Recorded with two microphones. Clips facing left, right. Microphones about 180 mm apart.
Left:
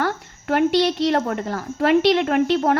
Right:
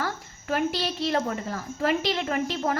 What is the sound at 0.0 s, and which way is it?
A woman's voice, 70° left (ahead or behind).